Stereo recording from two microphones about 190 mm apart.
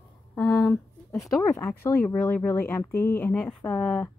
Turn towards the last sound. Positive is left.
turn(degrees=10)  # may be behind; listen again after turning